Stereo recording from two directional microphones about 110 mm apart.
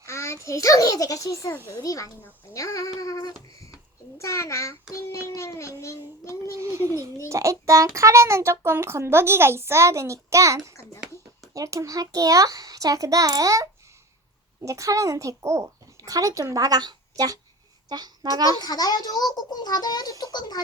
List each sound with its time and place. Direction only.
0.0 s a child's voice: 25° left (ahead or behind)
6.6 s a sound: 25° right (ahead or behind)
7.3 s a child's voice: 30° right (ahead or behind)
18.6 s a child's voice: 35° left (ahead or behind)